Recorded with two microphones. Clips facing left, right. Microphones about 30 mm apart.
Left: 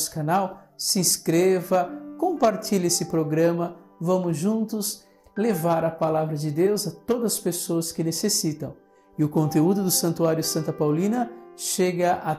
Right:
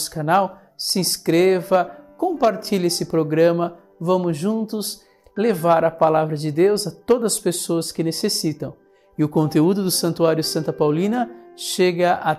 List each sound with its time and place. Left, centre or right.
0.2 s speech: right
0.7 s speech: right
2.1 s music: right
2.5 s speech: right
7.9 s speech: right